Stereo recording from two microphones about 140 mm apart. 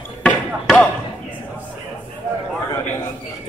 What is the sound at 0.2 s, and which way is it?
Basketball bounce, 5° left (ahead or behind).